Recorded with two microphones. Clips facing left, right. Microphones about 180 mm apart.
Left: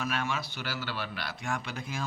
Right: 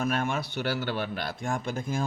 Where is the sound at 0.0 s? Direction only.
50° right (ahead or behind).